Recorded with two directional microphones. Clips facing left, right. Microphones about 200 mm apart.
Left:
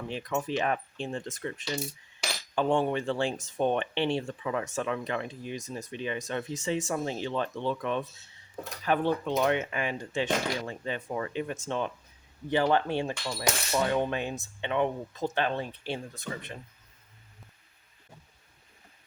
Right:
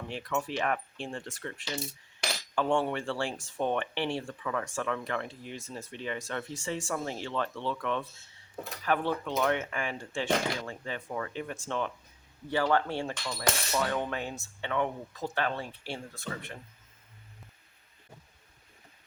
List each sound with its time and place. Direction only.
0.1 s speech: 20° left (ahead or behind)